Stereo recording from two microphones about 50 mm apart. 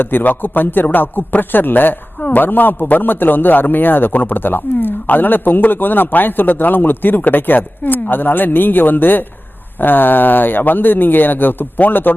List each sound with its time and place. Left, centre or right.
0.0 s a man's voice: left